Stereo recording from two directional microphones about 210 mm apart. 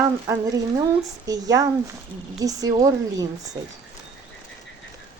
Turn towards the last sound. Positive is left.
turn(degrees=-15)  # may be behind; listen again after turning